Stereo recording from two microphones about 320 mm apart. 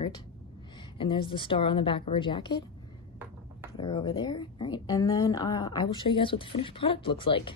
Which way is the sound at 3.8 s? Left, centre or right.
Centre.